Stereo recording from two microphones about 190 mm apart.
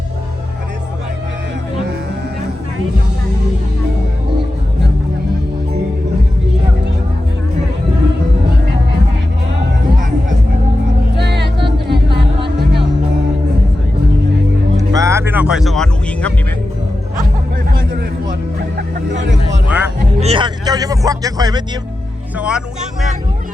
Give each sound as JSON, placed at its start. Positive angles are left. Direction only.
{"t": 11.2, "sound": "music", "side_deg": -60}
{"t": 14.9, "sound": "music", "side_deg": -15}
{"t": 19.1, "sound": "music", "side_deg": -70}
{"t": 19.6, "sound": "music", "side_deg": -10}
{"t": 20.1, "sound": "music", "side_deg": -30}
{"t": 22.4, "sound": "music", "side_deg": -5}